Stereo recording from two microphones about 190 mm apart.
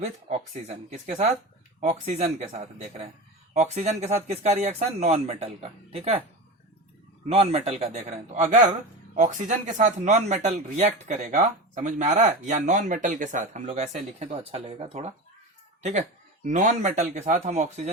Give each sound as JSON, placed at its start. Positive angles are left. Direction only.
{"t": 0.0, "sound": "speech", "side_deg": -35}
{"t": 7.3, "sound": "speech", "side_deg": -35}